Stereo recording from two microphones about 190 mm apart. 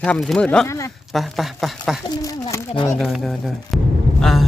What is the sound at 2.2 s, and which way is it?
Speech, 15° left (ahead or behind).